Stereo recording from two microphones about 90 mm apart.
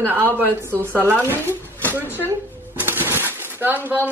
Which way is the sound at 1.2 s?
25° right (ahead or behind).